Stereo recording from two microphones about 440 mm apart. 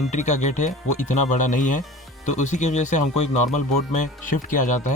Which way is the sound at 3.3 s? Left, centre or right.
Left.